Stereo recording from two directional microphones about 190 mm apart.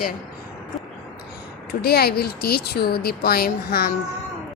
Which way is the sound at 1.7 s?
55° left (ahead or behind).